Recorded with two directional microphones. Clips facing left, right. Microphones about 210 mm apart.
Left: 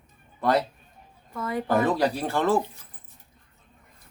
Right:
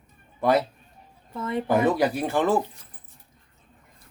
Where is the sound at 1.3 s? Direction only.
25° right (ahead or behind).